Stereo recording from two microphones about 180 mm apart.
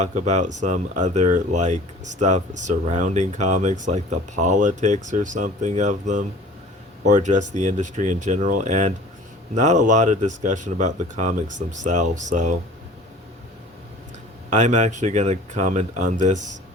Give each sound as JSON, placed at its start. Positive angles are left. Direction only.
{"t": 0.0, "sound": "speech", "side_deg": -40}
{"t": 14.5, "sound": "speech", "side_deg": -40}